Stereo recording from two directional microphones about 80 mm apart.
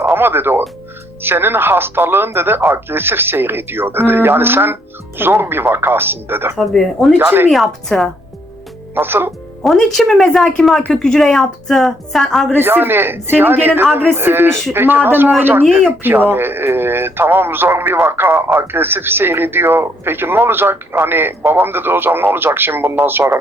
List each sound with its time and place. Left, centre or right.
0.1 s speech: right
6.7 s a woman's voice: centre
7.2 s speech: right
7.5 s a woman's voice: centre
9.0 s speech: right
9.6 s a woman's voice: centre
12.5 s speech: right